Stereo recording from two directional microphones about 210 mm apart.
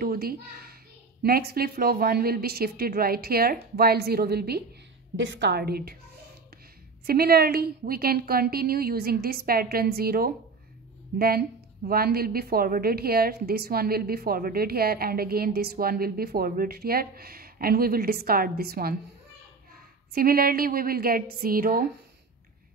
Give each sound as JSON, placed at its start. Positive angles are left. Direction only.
{"t": 0.0, "sound": "a child's voice", "side_deg": -45}
{"t": 5.1, "sound": "a woman's voice", "side_deg": -60}
{"t": 7.1, "sound": "a woman's voice", "side_deg": -45}
{"t": 20.2, "sound": "a woman's voice", "side_deg": -45}